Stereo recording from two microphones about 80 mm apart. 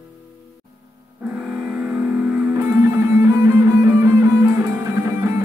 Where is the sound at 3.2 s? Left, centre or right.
Right.